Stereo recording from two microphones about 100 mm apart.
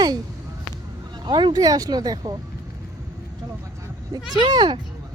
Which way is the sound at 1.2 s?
50° right (ahead or behind).